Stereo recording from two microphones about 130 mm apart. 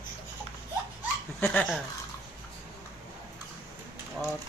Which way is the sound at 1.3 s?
15° left (ahead or behind).